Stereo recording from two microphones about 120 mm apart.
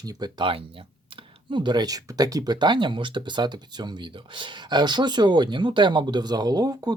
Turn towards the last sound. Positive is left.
turn(degrees=-30)  # may be behind; listen again after turning